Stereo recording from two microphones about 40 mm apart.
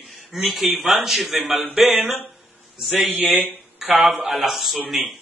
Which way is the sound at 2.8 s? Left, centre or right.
Centre.